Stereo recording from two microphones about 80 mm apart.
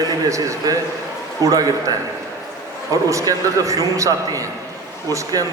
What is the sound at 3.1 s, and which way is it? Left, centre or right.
A man's voice, right.